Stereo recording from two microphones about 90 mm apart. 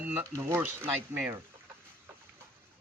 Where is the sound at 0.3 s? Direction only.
35° right (ahead or behind).